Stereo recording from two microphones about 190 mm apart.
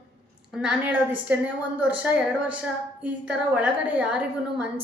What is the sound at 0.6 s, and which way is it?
A woman's voice, 5° right (ahead or behind).